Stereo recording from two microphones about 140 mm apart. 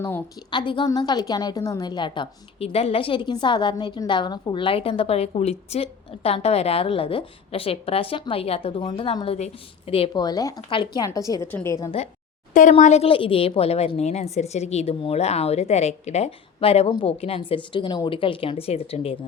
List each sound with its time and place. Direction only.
0.5 s a woman's voice: 35° left (ahead or behind)
10.2 s speech: 25° left (ahead or behind)
12.7 s a woman's voice: 50° left (ahead or behind)